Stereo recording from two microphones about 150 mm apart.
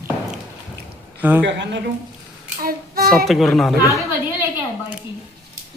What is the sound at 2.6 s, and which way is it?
Child singing, 80° right.